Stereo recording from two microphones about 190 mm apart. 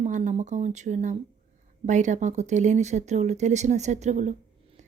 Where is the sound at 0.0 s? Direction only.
40° right (ahead or behind).